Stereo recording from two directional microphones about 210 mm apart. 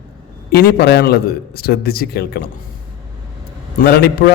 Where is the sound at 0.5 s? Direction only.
50° left (ahead or behind).